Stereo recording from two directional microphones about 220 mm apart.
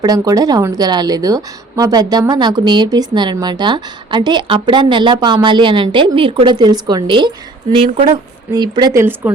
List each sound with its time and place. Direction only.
0.0 s speech: 15° right (ahead or behind)